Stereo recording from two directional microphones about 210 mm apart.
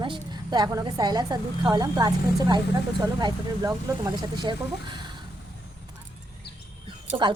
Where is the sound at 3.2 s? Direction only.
20° right (ahead or behind).